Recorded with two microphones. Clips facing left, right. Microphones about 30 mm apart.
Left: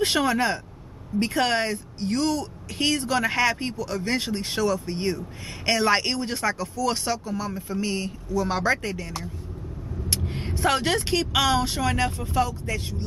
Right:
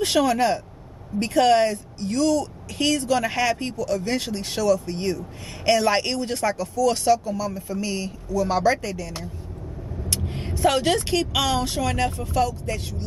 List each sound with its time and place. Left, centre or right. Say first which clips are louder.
0.2 s speech: right 3 dB; left
8.8 s speech: right 1 dB; left
10.2 s vehicle: even; centre
10.7 s speech: right 1 dB; centre
12.4 s speech: right 1 dB; left